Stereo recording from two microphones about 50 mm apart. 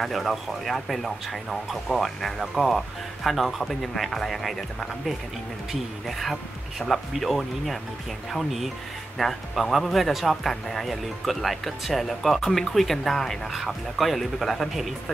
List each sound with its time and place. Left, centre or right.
0.0 s speech: centre